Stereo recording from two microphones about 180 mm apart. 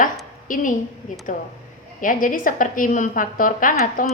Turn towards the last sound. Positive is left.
turn(degrees=50)  # may be behind; listen again after turning